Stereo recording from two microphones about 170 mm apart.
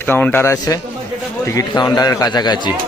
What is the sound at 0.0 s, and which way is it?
A man's voice, 10° left (ahead or behind).